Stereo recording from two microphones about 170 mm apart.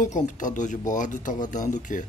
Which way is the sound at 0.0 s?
50° left (ahead or behind).